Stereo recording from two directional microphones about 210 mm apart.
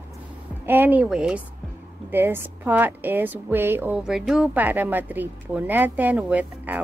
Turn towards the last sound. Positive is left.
turn(degrees=-5)  # may be behind; listen again after turning